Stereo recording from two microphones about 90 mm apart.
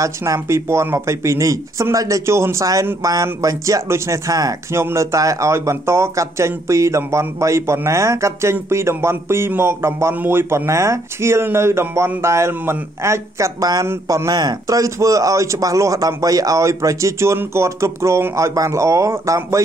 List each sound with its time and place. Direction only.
0.0 s speech: 35° right (ahead or behind)